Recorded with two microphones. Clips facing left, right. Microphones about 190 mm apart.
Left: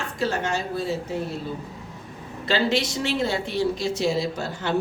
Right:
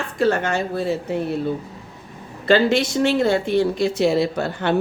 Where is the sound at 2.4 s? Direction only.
55° right (ahead or behind).